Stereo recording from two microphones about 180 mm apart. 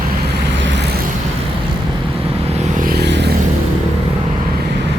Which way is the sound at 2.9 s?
65° right (ahead or behind).